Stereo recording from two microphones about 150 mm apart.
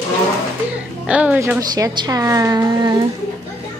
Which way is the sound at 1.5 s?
25° right (ahead or behind).